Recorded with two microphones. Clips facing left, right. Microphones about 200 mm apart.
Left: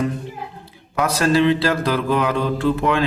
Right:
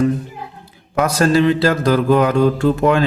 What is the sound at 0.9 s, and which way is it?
Mantra, 45° right (ahead or behind).